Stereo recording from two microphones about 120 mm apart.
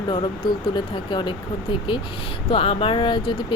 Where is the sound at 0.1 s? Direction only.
40° left (ahead or behind).